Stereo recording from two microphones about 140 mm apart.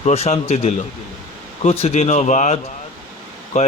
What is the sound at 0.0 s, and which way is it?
A man's voice, 50° left (ahead or behind).